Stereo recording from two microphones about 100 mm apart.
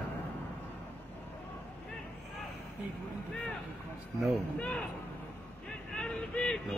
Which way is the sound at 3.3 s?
10° left (ahead or behind).